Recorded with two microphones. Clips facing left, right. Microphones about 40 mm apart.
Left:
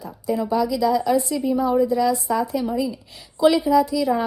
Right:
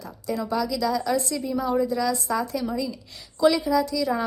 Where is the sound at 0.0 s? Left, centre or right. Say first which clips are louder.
Left 5 dB; left.